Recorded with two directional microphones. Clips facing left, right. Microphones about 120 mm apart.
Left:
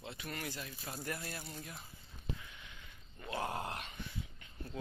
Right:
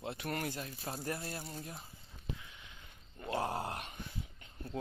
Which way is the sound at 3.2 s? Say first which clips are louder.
Right 3 dB; 35° right (ahead or behind).